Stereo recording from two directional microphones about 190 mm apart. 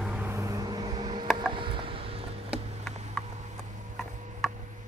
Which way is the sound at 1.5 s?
25° right (ahead or behind).